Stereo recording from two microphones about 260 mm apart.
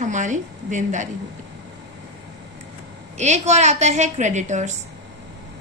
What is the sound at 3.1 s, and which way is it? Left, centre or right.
A woman's voice, right.